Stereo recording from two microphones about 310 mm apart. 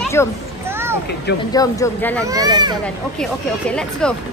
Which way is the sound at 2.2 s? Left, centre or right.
Centre.